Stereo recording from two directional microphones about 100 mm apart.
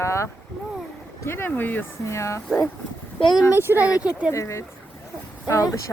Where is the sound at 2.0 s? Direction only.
30° left (ahead or behind).